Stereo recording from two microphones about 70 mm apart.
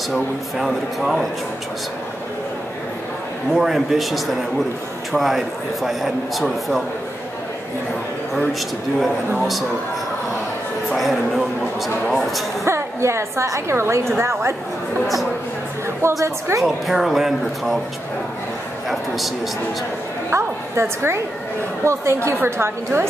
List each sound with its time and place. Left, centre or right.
0.1 s speech: centre
3.5 s speech: centre
9.4 s speech: centre
11.0 s speech: centre
12.6 s a woman's voice: right
16.0 s a woman's voice: right
16.6 s speech: centre
18.9 s a sound: centre
20.2 s a sound: right
21.8 s a woman's voice: right